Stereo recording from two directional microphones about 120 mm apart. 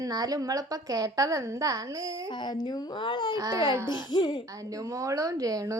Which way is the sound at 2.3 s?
40° left (ahead or behind).